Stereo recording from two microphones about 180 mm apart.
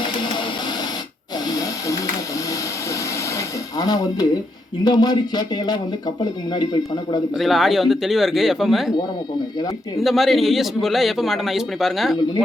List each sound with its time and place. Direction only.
1.5 s a sound: 20° left (ahead or behind)
4.8 s speech: 20° left (ahead or behind)
7.3 s a man's voice: centre (ahead or behind)
10.0 s a man's voice: centre (ahead or behind)